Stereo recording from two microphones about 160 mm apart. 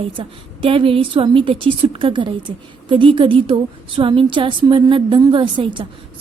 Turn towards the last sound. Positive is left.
turn(degrees=-30)  # may be behind; listen again after turning